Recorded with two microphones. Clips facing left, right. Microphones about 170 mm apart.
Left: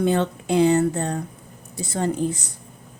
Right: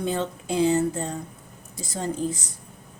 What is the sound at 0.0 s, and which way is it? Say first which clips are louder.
A woman's voice: left 6 dB; 65° left (ahead or behind).